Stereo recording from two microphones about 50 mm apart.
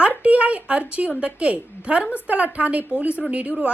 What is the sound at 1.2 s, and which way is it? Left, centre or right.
Speech, right.